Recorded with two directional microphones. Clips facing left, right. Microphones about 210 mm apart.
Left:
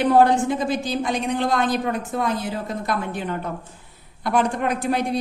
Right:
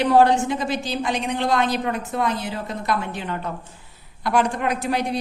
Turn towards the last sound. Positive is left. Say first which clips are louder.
# left 1 dB
turn(degrees=50)  # may be behind; listen again after turning